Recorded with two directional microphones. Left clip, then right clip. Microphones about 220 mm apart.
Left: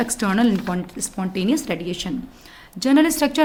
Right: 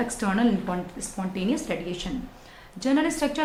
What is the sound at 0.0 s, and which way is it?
A woman's voice, 50° left (ahead or behind).